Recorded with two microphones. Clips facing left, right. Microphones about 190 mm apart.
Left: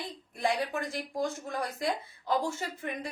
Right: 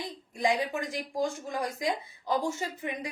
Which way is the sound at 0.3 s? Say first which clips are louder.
Right 2 dB; 15° right (ahead or behind).